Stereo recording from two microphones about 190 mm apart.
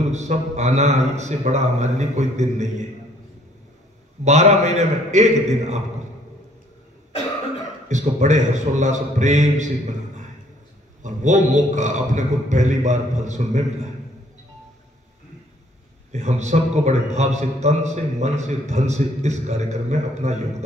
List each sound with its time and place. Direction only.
0.1 s a man's voice: 35° right (ahead or behind)
4.2 s a man's voice: 35° right (ahead or behind)
7.9 s a man's voice: 40° right (ahead or behind)
11.0 s a man's voice: 40° right (ahead or behind)
16.1 s a man's voice: 35° right (ahead or behind)